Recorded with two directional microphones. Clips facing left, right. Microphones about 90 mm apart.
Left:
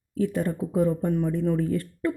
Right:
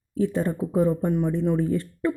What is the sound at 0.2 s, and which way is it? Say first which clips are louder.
Speech: right 2 dB; 30° right (ahead or behind).